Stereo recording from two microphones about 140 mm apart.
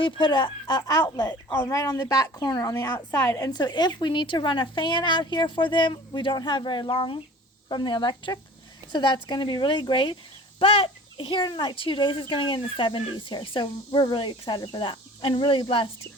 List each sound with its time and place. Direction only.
0.0 s a child's voice: 35° left (ahead or behind); by 3.5 s 20° left (ahead or behind)
3.5 s a child's voice: 30° left (ahead or behind)